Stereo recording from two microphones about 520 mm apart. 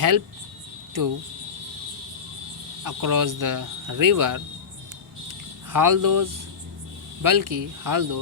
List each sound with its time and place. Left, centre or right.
1.0 s speech: right
2.8 s speech: right
5.7 s speech: right